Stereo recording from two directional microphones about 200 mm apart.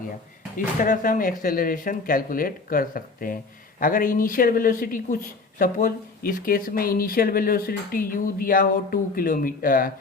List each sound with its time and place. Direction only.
0.5 s speech: 40° left (ahead or behind)